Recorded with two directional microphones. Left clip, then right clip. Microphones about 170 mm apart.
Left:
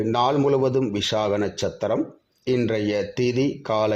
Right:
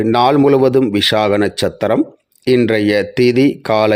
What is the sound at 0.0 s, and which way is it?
A man's voice, 40° right (ahead or behind).